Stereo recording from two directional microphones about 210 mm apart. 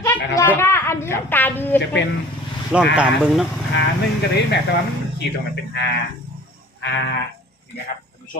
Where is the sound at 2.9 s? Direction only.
5° right (ahead or behind).